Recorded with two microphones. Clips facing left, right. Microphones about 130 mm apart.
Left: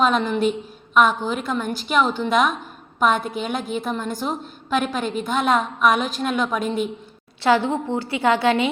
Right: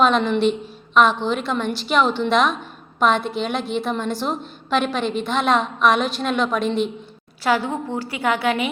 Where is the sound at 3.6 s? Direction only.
45° left (ahead or behind).